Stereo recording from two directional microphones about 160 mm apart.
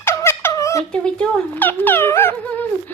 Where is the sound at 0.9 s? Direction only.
5° left (ahead or behind).